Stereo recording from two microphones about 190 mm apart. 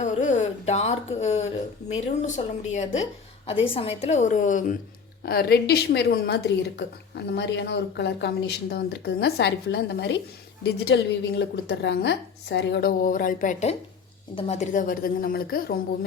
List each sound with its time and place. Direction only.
0.0 s a sound: 40° left (ahead or behind)
1.9 s a woman's voice: 35° left (ahead or behind)
5.2 s a woman's voice: 55° left (ahead or behind)